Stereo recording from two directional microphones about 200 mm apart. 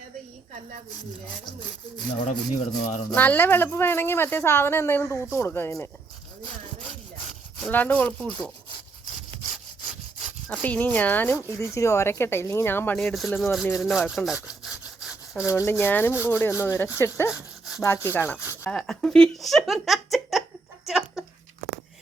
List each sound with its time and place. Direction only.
2.2 s a man's voice: 35° left (ahead or behind)
3.1 s speech: 10° left (ahead or behind)
7.6 s speech: 5° left (ahead or behind)
10.5 s speech: 10° left (ahead or behind)
14.3 s sawing: 5° right (ahead or behind)
15.5 s speech: 10° left (ahead or behind)
17.3 s a sound: 5° right (ahead or behind)
17.8 s speech: 10° left (ahead or behind)
20.8 s a sound: centre (ahead or behind)